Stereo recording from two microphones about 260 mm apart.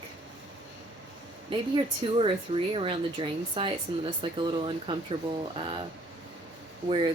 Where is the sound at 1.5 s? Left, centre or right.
Centre.